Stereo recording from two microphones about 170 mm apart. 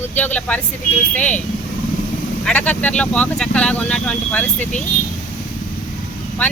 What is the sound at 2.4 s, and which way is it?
Speech, 10° left (ahead or behind).